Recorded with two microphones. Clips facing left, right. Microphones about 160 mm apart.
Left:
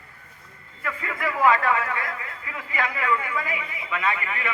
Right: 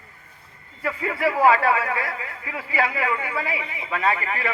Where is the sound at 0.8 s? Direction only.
30° right (ahead or behind).